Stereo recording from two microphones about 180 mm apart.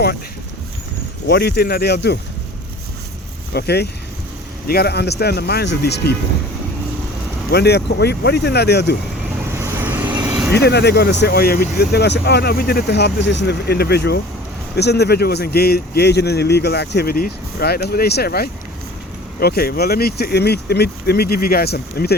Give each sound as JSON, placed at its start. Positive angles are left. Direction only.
{"t": 1.3, "sound": "speech", "side_deg": 65}
{"t": 3.5, "sound": "speech", "side_deg": 65}
{"t": 7.5, "sound": "speech", "side_deg": 65}
{"t": 9.6, "sound": "vehicle", "side_deg": -10}
{"t": 10.5, "sound": "speech", "side_deg": 65}